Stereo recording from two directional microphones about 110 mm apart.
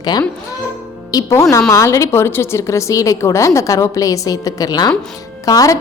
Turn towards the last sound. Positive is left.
turn(degrees=30)  # may be behind; listen again after turning